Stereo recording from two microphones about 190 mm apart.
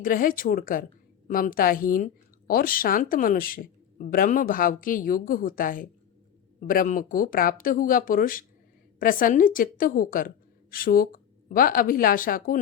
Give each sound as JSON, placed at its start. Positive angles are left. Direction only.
{"t": 0.0, "sound": "a woman's voice", "side_deg": 45}